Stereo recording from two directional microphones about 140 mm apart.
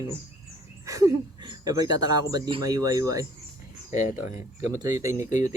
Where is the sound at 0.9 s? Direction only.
25° right (ahead or behind).